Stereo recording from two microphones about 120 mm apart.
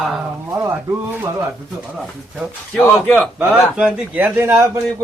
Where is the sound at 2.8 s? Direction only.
15° left (ahead or behind).